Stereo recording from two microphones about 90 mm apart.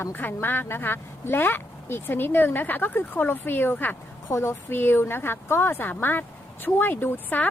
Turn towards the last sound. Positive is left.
turn(degrees=20)  # may be behind; listen again after turning